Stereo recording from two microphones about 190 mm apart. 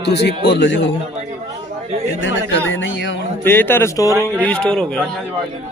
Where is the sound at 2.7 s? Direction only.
75° left (ahead or behind).